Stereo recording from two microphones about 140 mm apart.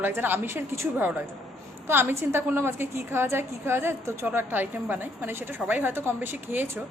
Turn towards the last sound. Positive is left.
turn(degrees=-15)  # may be behind; listen again after turning